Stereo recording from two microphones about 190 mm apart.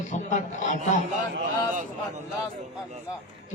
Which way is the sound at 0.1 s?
40° left (ahead or behind).